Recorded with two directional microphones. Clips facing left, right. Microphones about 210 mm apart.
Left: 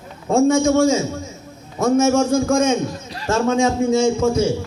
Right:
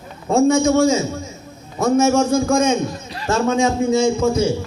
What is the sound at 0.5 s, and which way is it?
A man's voice, 45° left (ahead or behind).